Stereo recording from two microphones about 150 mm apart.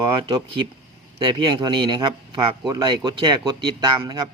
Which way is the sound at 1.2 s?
30° right (ahead or behind).